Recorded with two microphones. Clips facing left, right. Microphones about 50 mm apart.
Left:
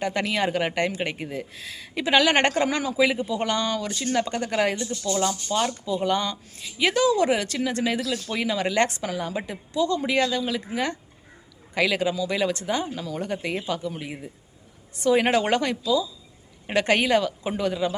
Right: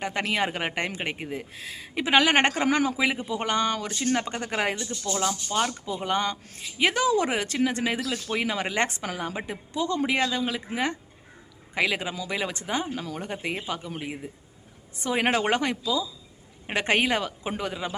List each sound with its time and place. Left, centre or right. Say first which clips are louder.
0.0 s speech: left 2 dB; right
2.6 s speech: right 3 dB; right
3.0 s speech: left 4 dB; right
4.1 s speech: left 4 dB; right
5.8 s speech: left 3 dB; right
11.7 s speech: left 4 dB; right
12.9 s speech: left 1 dB; right
13.1 s a man's voice: left 3 dB; right